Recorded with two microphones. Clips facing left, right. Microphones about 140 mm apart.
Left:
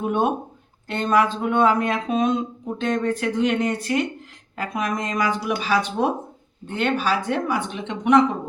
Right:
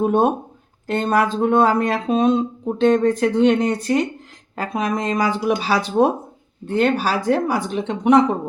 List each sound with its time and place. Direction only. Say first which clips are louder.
0.0 s speech: right 5 dB; 40° right (ahead or behind)